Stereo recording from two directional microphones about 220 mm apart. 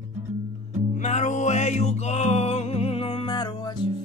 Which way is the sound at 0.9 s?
35° left (ahead or behind).